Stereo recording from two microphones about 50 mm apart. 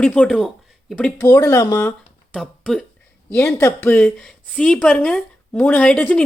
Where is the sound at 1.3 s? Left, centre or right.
Left.